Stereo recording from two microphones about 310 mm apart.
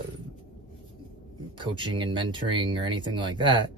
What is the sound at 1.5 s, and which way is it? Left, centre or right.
Speech, centre.